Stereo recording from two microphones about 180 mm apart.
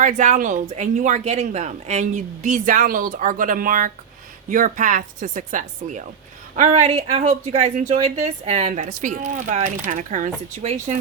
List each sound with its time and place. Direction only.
0.0 s speech: 45° right (ahead or behind)